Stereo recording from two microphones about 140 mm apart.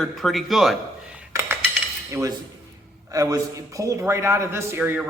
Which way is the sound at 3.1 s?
25° right (ahead or behind).